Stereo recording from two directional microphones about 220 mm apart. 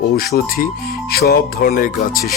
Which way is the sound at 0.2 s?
45° left (ahead or behind).